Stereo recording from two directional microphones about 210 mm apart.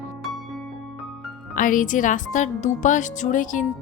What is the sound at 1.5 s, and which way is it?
Speech, 40° left (ahead or behind).